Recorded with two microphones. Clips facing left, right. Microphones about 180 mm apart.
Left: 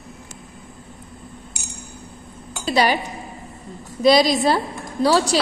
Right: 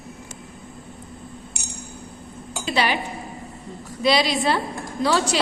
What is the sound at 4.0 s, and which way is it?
A woman's voice, 40° left (ahead or behind).